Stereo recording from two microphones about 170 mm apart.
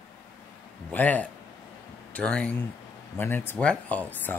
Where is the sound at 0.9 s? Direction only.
10° left (ahead or behind).